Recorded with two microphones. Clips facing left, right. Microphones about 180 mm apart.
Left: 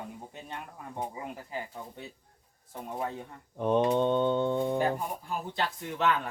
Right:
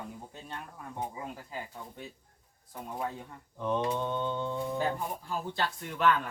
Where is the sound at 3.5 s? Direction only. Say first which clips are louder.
Left 6 dB; 60° left (ahead or behind).